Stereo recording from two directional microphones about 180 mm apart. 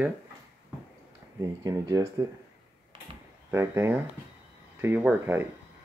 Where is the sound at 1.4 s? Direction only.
20° right (ahead or behind).